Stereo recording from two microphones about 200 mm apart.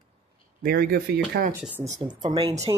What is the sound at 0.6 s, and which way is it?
Speech, 50° right (ahead or behind).